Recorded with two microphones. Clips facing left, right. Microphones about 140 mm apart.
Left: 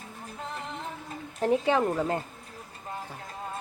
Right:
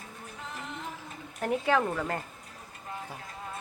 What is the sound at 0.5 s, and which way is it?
Music, 35° left (ahead or behind).